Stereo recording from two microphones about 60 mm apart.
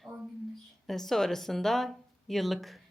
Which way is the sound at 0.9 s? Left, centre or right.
Centre.